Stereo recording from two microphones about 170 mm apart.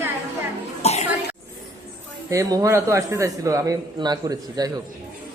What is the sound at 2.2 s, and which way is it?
A man's voice, 20° right (ahead or behind).